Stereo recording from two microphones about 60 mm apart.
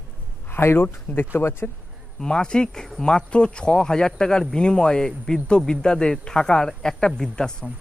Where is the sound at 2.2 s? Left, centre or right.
Centre.